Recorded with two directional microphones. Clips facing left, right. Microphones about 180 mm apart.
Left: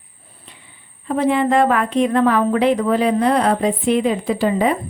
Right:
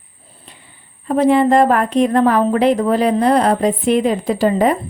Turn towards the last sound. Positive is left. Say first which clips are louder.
# right 3 dB
turn(degrees=-45)  # may be behind; listen again after turning